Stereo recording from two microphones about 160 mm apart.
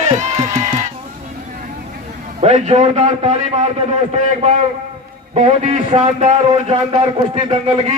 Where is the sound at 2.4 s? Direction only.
45° right (ahead or behind).